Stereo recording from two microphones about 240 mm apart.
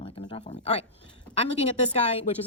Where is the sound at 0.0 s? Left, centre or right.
Centre.